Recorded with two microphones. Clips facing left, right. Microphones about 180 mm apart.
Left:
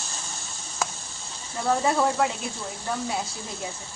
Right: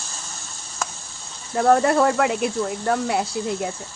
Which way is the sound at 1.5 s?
65° right (ahead or behind).